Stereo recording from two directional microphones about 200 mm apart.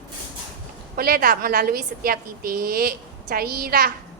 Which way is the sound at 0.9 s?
50° right (ahead or behind).